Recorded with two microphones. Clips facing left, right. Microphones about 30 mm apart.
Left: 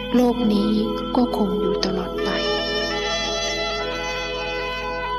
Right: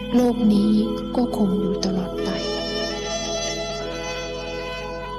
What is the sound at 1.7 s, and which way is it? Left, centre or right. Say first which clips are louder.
Speech: left 2 dB; left.